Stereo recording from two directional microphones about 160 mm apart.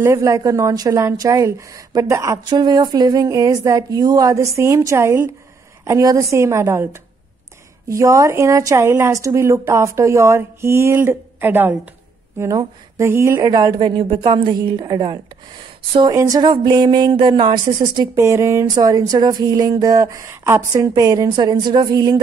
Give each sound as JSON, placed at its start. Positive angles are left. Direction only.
{"t": 0.0, "sound": "speech", "side_deg": -20}